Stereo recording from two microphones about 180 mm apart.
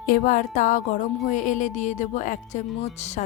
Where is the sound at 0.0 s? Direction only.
50° left (ahead or behind).